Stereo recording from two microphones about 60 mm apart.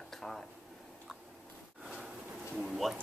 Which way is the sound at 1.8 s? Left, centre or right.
Centre.